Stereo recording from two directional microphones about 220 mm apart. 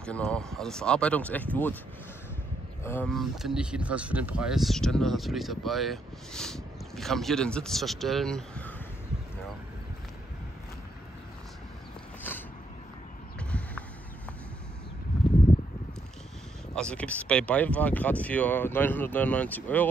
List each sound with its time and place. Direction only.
0.0 s speech: 5° left (ahead or behind)
2.8 s speech: 10° left (ahead or behind)
12.2 s a sound: 10° left (ahead or behind)
16.7 s speech: 5° left (ahead or behind)